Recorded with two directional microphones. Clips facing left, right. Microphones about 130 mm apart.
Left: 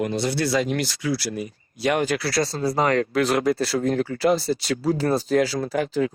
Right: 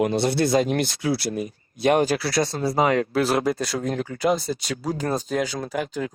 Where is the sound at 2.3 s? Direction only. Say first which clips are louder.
Even; 25° right (ahead or behind).